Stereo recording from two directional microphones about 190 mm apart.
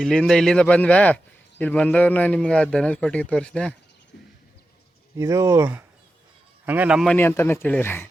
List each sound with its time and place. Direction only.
0.0 s speech: 5° left (ahead or behind)
5.1 s a man's voice: 15° right (ahead or behind)
7.2 s speech: 10° left (ahead or behind)